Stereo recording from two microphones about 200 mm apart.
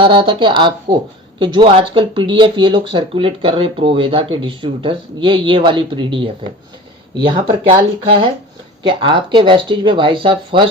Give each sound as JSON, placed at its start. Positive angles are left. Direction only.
{"t": 0.0, "sound": "speech", "side_deg": -25}
{"t": 8.8, "sound": "speech", "side_deg": -25}